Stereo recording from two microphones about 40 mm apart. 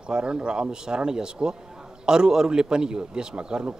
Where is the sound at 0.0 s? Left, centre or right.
Right.